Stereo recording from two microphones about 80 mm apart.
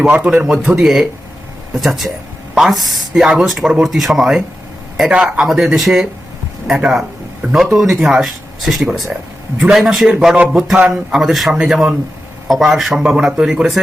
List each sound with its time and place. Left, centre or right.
0.0 s a man's voice: centre
0.4 s a man's voice: centre
11.1 s speech: centre